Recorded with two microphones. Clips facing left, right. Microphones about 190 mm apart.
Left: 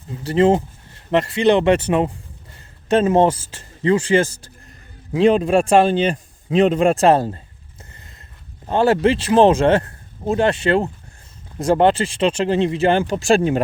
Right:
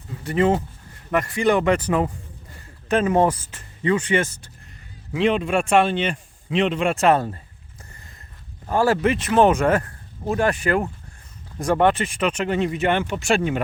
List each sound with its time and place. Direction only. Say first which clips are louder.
0.2 s a man's voice: left 4 dB; 25° left (ahead or behind)